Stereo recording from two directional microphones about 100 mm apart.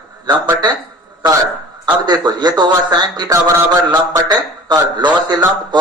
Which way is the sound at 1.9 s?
45° right (ahead or behind).